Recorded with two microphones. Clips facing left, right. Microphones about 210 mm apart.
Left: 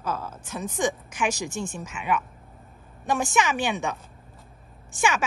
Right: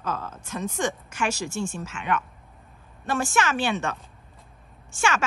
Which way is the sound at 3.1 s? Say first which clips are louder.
Left 1 dB; 15° left (ahead or behind).